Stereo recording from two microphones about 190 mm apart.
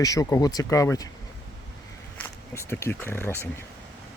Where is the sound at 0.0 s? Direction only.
20° left (ahead or behind).